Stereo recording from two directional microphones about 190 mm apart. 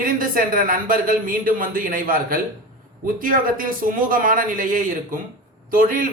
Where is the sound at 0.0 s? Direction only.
50° right (ahead or behind).